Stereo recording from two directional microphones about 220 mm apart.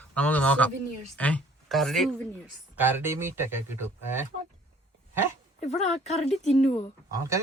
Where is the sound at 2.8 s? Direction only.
10° right (ahead or behind).